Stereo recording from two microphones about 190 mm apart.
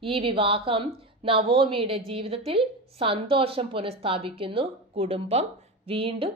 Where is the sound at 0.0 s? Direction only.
30° right (ahead or behind).